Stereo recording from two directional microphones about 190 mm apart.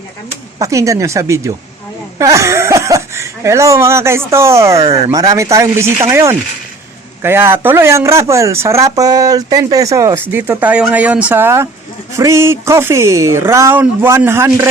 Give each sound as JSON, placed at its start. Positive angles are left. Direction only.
{"t": 0.6, "sound": "speech", "side_deg": -15}